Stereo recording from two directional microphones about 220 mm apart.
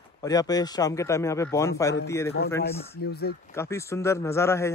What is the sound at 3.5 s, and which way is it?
Speech, 15° left (ahead or behind).